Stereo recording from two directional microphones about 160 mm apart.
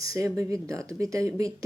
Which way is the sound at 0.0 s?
20° right (ahead or behind).